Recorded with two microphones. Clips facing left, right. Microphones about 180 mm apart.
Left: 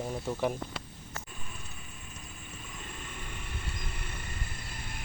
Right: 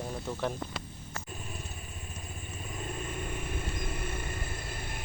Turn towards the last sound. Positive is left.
turn(degrees=-50)  # may be behind; listen again after turning